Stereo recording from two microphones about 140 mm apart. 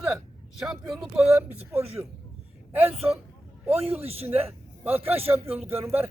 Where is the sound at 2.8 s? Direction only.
45° right (ahead or behind).